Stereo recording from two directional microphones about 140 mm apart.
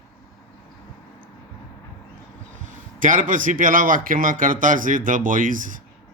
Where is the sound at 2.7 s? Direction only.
65° right (ahead or behind).